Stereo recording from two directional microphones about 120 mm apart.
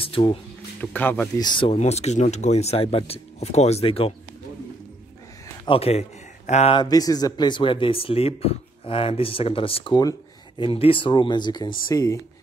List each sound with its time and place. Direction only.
0.0 s speech: 50° left (ahead or behind)
0.7 s speech: 15° left (ahead or behind)
1.4 s speech: 40° left (ahead or behind)
1.7 s speech: 65° left (ahead or behind)
5.7 s a man's voice: 55° left (ahead or behind)
6.7 s speech: 35° left (ahead or behind)